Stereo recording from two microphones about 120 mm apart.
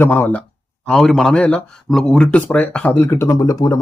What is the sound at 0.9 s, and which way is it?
Speech, 5° left (ahead or behind).